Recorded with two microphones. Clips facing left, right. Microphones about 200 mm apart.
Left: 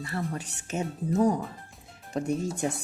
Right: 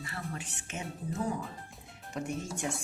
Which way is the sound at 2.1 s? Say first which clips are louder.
Left 7 dB; 35° left (ahead or behind).